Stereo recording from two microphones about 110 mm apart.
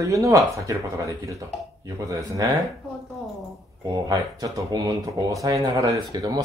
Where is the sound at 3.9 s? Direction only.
35° right (ahead or behind).